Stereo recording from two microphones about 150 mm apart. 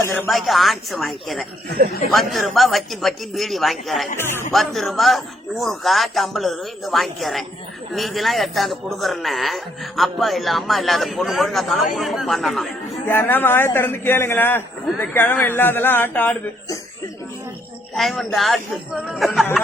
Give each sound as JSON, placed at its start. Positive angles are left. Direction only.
{"t": 0.0, "sound": "a man's voice", "side_deg": 15}
{"t": 0.3, "sound": "a man's voice", "side_deg": 0}
{"t": 4.2, "sound": "a man's voice", "side_deg": 15}
{"t": 4.5, "sound": "a man's voice", "side_deg": 0}
{"t": 13.1, "sound": "a man's voice", "side_deg": 15}
{"t": 17.9, "sound": "a man's voice", "side_deg": 0}